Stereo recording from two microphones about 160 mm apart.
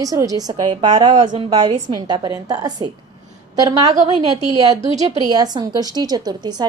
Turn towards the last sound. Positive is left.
turn(degrees=-25)  # may be behind; listen again after turning